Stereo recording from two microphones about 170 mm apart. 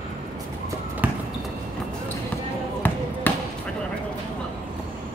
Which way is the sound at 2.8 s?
10° left (ahead or behind).